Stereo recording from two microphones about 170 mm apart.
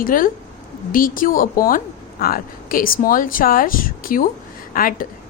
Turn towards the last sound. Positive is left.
turn(degrees=55)  # may be behind; listen again after turning